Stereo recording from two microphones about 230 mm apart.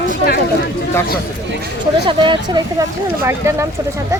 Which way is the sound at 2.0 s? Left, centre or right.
Right.